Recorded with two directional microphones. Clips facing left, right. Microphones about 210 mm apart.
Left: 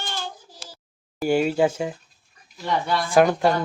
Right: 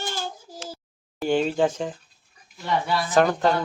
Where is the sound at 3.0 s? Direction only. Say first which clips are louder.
Left 3 dB; 10° left (ahead or behind).